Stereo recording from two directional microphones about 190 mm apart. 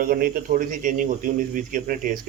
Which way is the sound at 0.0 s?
50° right (ahead or behind).